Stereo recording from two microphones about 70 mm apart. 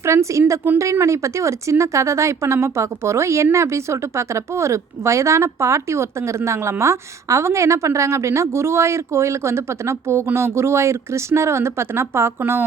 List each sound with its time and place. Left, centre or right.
0.0 s speech: right